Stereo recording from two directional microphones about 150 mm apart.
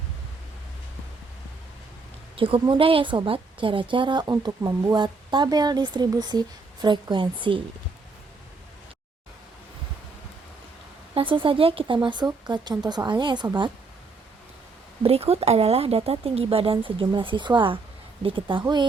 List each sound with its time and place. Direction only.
2.3 s a woman's voice: 35° right (ahead or behind)
11.1 s a woman's voice: 35° right (ahead or behind)
15.0 s a woman's voice: 40° right (ahead or behind)